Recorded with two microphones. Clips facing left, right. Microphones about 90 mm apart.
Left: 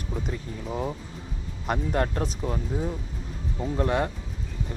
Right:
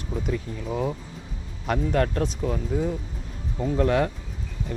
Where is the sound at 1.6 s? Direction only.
10° left (ahead or behind).